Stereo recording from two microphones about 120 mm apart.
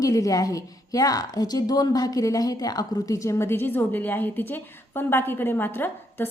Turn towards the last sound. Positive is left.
turn(degrees=15)  # may be behind; listen again after turning